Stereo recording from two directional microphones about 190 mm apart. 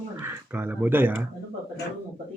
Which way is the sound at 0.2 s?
10° right (ahead or behind).